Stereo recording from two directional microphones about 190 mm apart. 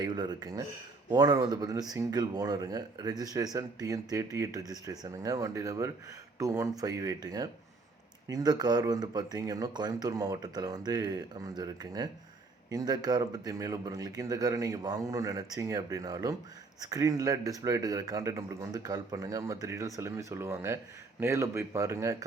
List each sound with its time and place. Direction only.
0.0 s speech: 20° right (ahead or behind)